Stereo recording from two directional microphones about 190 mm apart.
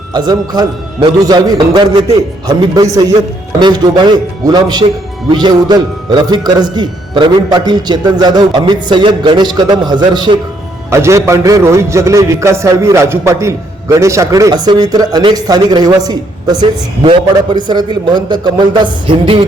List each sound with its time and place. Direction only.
0.1 s a man's voice: 20° right (ahead or behind)